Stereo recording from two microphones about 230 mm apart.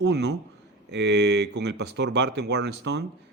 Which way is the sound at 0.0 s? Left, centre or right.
Right.